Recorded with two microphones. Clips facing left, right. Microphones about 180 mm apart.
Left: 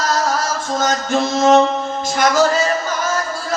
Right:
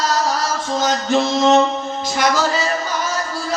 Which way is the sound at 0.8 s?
50° left (ahead or behind).